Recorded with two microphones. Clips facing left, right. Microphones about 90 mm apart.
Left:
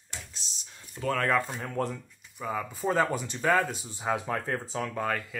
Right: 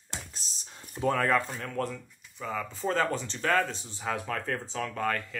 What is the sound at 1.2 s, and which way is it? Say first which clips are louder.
Speech: even; 5° left (ahead or behind).